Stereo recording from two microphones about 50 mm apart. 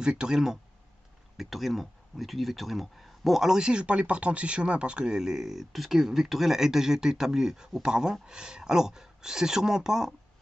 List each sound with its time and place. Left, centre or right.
0.0 s speech: centre
1.3 s speech: centre